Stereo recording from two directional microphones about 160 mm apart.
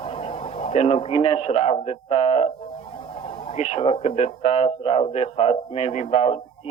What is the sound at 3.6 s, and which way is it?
A man's voice, 40° left (ahead or behind).